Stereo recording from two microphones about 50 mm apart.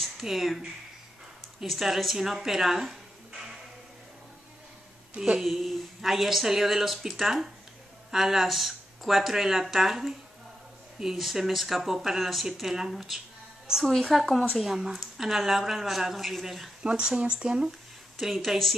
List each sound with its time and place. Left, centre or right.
0.0 s a woman's voice: centre
5.2 s a woman's voice: centre
16.8 s speech: centre
17.6 s a sound: centre